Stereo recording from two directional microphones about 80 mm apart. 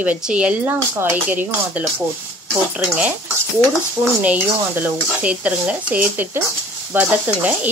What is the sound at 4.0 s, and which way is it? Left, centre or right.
Speech, centre.